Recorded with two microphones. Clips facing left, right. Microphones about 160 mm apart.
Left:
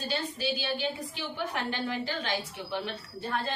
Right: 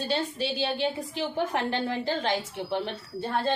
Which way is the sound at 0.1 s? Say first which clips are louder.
Right 2 dB; 25° right (ahead or behind).